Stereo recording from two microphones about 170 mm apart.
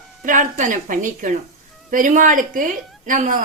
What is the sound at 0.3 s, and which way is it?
Speech, 50° right (ahead or behind).